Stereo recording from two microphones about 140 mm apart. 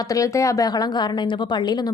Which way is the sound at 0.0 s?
25° left (ahead or behind).